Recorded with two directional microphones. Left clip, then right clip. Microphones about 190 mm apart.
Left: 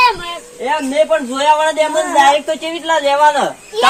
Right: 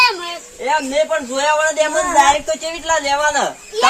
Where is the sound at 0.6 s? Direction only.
Centre (ahead or behind).